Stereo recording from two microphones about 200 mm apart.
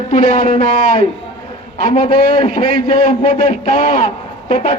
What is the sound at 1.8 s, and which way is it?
A man's voice, 30° left (ahead or behind).